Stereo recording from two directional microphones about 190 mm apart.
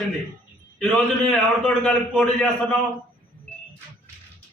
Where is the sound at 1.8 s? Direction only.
5° left (ahead or behind).